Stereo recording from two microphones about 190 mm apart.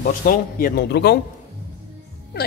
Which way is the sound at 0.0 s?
50° left (ahead or behind).